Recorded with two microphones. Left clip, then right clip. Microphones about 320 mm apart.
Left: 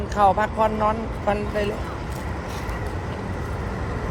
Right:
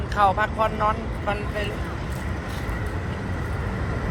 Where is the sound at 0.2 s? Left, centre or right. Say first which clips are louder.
Left 2 dB; left.